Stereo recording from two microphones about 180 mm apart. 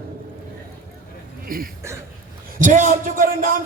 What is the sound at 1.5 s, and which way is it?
Speech, 55° right (ahead or behind).